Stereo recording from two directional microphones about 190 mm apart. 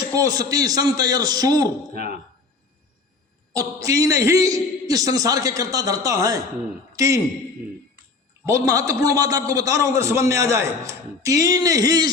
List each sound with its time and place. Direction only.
0.1 s a man's voice: 20° right (ahead or behind)
1.9 s speech: 55° right (ahead or behind)
3.5 s a man's voice: 20° right (ahead or behind)
8.4 s a man's voice: 15° right (ahead or behind)